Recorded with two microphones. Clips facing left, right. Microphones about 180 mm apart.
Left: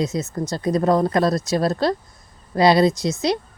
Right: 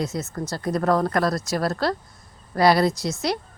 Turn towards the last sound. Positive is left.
turn(degrees=20)  # may be behind; listen again after turning